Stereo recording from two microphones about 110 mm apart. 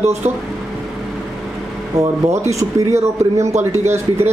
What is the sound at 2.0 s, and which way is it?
Speech, 30° right (ahead or behind).